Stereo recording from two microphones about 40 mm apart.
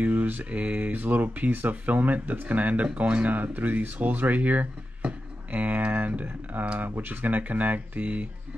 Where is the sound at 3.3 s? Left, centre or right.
Right.